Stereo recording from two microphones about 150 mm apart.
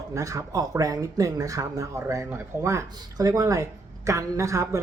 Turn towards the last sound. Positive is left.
turn(degrees=-20)  # may be behind; listen again after turning